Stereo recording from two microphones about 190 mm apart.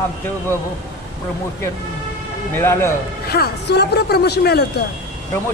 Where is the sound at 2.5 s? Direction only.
15° left (ahead or behind).